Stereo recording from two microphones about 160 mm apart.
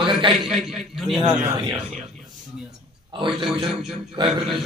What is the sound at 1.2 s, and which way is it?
Speech, 25° right (ahead or behind).